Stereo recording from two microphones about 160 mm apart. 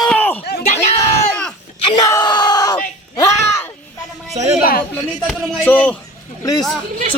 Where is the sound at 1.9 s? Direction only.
20° left (ahead or behind).